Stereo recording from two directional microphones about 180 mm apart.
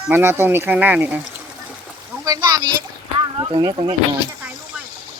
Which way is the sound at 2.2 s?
20° right (ahead or behind).